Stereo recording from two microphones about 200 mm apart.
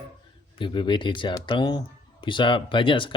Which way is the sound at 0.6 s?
25° left (ahead or behind).